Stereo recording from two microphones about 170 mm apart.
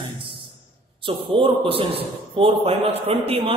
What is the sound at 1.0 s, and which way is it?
A man's voice, 30° right (ahead or behind).